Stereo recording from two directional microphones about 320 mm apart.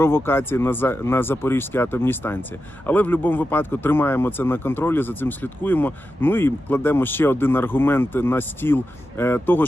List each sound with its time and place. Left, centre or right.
0.0 s speech: centre